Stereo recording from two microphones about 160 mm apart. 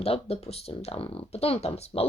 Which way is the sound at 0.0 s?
40° left (ahead or behind).